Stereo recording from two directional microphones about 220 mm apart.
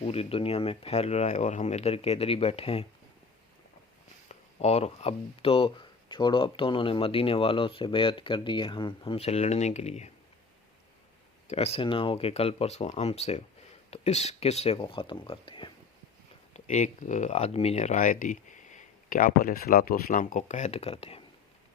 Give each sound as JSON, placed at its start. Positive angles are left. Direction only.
{"t": 0.0, "sound": "speech", "side_deg": 25}
{"t": 4.3, "sound": "speech", "side_deg": 30}
{"t": 11.4, "sound": "speech", "side_deg": 30}
{"t": 16.6, "sound": "speech", "side_deg": 35}